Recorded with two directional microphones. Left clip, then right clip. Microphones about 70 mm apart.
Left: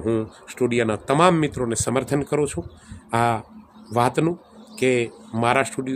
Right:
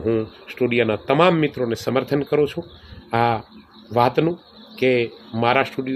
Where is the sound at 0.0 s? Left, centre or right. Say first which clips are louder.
Right 2 dB; left.